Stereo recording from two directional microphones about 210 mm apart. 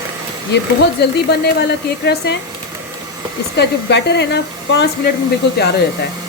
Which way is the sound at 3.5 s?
55° left (ahead or behind).